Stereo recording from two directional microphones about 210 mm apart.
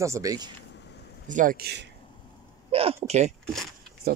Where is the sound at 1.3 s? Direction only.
40° right (ahead or behind).